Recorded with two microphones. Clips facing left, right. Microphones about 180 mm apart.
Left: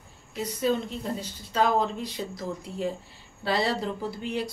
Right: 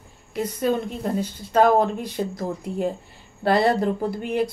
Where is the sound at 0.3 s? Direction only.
55° right (ahead or behind).